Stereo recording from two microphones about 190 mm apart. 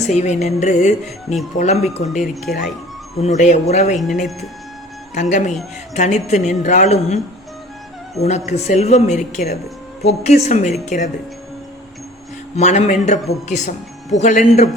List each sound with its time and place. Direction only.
0.0 s a man's voice: 35° left (ahead or behind)
5.1 s a man's voice: 40° left (ahead or behind)
8.2 s a man's voice: 35° left (ahead or behind)
12.5 s a man's voice: 35° left (ahead or behind)